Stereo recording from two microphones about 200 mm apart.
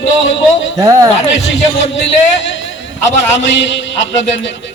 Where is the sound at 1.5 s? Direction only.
65° left (ahead or behind).